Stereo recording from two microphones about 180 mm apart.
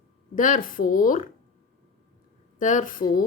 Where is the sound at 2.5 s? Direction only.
45° left (ahead or behind).